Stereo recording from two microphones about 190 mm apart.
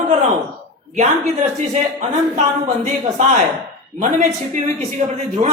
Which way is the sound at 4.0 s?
40° right (ahead or behind).